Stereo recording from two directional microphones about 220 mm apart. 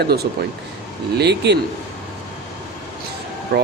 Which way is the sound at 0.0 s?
45° right (ahead or behind).